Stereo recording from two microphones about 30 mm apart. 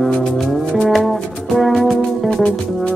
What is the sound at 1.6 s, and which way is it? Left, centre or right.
Music, centre.